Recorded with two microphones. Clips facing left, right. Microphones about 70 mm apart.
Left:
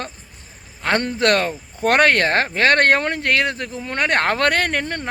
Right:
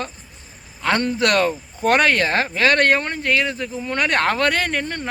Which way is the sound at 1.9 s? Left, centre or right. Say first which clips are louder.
Left 1 dB; left.